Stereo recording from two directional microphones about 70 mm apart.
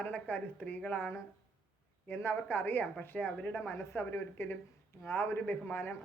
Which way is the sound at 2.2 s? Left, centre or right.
Left.